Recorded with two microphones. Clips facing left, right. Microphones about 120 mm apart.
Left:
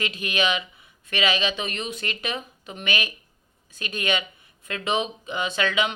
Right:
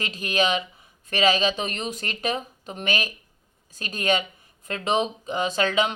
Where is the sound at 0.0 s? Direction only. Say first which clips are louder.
Right 1 dB; 35° right (ahead or behind).